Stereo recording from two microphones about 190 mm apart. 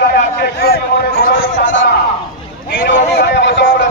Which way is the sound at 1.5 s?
80° left.